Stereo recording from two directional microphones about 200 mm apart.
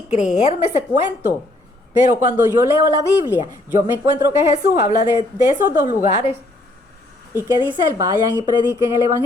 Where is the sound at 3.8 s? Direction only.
10° right (ahead or behind).